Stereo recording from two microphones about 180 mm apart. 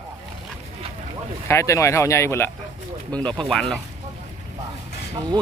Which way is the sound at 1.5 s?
15° left (ahead or behind).